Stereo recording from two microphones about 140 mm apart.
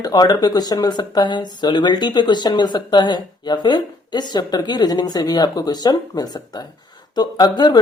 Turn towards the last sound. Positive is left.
turn(degrees=30)  # may be behind; listen again after turning